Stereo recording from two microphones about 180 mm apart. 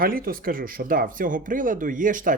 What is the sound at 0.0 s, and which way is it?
Speech, 55° right (ahead or behind).